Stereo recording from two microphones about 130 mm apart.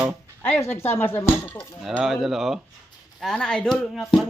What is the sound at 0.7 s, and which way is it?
Speech, 15° left (ahead or behind).